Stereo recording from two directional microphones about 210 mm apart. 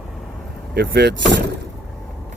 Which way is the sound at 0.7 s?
50° right (ahead or behind).